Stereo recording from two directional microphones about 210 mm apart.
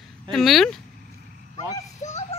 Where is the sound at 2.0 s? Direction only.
30° left (ahead or behind).